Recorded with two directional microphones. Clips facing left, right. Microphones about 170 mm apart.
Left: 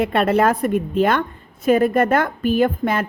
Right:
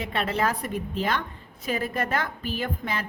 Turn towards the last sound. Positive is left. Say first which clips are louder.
# left 12 dB
turn(degrees=50)  # may be behind; listen again after turning